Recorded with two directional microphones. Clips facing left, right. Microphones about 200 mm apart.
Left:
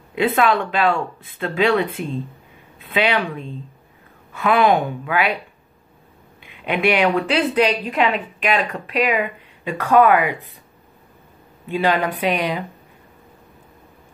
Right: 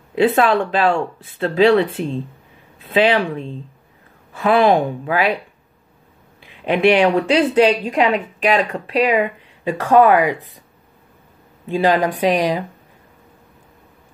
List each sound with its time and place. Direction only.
0.1 s a woman's voice: 35° right (ahead or behind)
6.4 s a woman's voice: 35° right (ahead or behind)
11.7 s a woman's voice: 35° right (ahead or behind)